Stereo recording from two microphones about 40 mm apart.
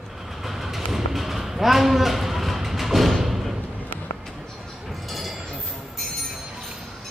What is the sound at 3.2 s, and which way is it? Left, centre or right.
Thump, centre.